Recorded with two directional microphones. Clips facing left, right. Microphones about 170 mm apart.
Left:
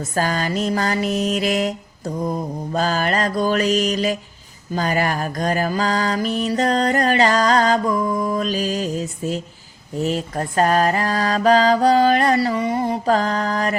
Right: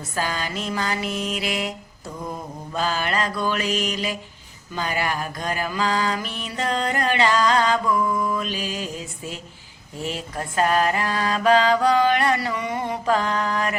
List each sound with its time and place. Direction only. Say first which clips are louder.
0.1 s mantra: left 5 dB; 45° left (ahead or behind)